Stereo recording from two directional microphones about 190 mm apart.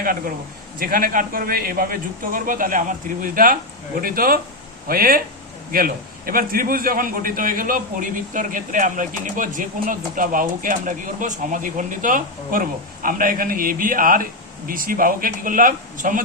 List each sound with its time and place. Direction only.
0.0 s a man's voice: 50° right (ahead or behind)